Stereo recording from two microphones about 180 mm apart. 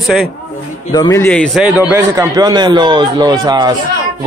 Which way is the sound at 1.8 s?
15° right (ahead or behind).